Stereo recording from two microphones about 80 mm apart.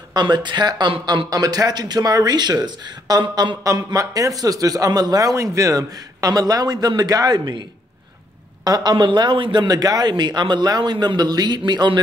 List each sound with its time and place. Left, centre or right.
0.1 s speech: right
1.3 s a man's voice: right
3.6 s a man's voice: right
8.6 s speech: right
9.7 s a man's voice: right